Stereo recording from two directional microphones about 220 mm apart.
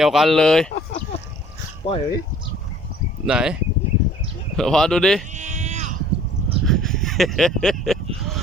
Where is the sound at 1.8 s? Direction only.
25° left (ahead or behind).